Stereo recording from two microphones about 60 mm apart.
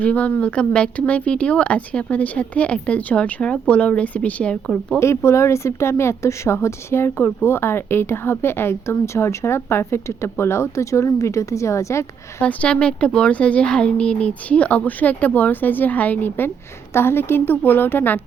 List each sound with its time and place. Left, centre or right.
0.0 s speech: left
4.6 s speech: centre
4.9 s a woman's voice: left
12.4 s speech: left
16.9 s a woman's voice: left